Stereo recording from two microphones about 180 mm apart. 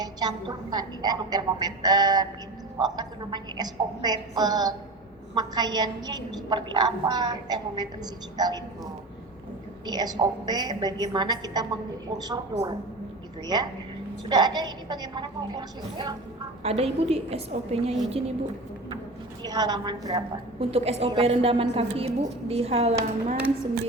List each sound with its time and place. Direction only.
0.0 s a woman's voice: 20° right (ahead or behind)
16.6 s a woman's voice: 35° right (ahead or behind)
19.4 s a woman's voice: 20° right (ahead or behind); by 23.4 s 40° right (ahead or behind)